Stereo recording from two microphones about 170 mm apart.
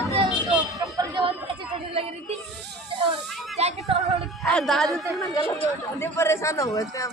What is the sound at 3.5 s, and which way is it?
Music, 40° right (ahead or behind).